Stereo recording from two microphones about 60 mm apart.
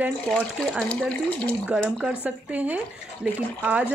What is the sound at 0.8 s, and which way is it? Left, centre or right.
Speech, centre.